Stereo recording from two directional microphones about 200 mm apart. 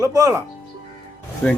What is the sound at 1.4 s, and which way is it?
Speech, 5° left (ahead or behind).